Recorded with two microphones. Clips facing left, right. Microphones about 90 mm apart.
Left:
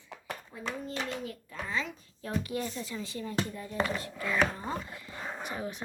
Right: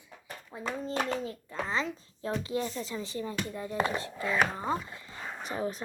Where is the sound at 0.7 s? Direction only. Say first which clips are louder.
Right 5 dB; 30° right (ahead or behind).